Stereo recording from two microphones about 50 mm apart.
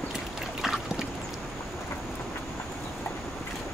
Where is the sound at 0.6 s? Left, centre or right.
Centre.